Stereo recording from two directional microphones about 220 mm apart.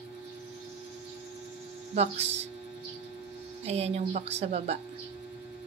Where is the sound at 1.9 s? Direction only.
30° right (ahead or behind).